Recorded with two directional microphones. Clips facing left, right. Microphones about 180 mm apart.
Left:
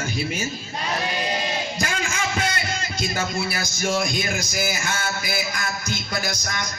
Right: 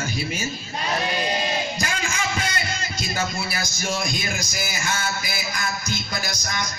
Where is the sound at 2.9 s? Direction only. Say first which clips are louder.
Left 2 dB; 50° left (ahead or behind).